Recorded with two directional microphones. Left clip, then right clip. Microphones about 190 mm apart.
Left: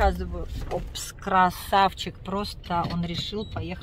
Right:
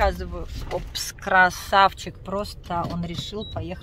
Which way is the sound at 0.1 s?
5° left (ahead or behind).